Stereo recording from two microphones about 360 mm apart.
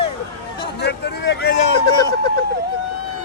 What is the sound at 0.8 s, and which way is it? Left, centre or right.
Speech, left.